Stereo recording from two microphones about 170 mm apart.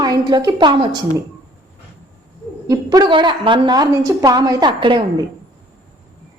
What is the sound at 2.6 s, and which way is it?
A woman's voice, 25° right (ahead or behind).